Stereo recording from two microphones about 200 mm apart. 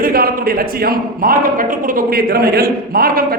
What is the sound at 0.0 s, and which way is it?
A man's voice, 45° right (ahead or behind).